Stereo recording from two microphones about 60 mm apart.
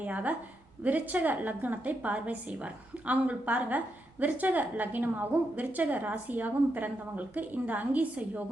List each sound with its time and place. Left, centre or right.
0.0 s a woman's voice: right